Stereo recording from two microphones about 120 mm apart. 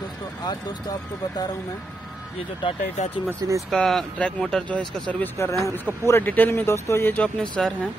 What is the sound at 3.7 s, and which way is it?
A man's voice, 5° left (ahead or behind).